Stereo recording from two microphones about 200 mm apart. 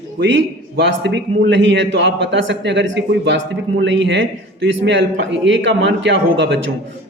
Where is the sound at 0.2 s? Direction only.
60° right (ahead or behind).